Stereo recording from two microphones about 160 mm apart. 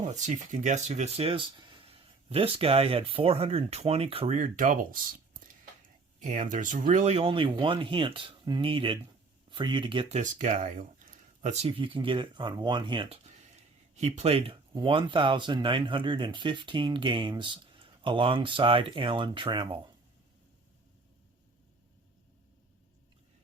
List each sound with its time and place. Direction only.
0.0 s speech: 50° right (ahead or behind)
4.4 s speech: 55° right (ahead or behind); by 10.2 s 30° right (ahead or behind)
10.2 s speech: 50° right (ahead or behind)
11.6 s speech: 35° right (ahead or behind)
13.2 s speech: 45° right (ahead or behind)